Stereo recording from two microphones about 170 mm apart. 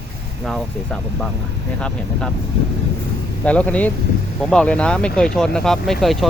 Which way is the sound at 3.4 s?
10° left (ahead or behind).